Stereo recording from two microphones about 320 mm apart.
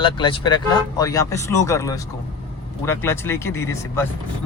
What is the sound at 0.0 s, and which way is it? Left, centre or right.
Speech, centre.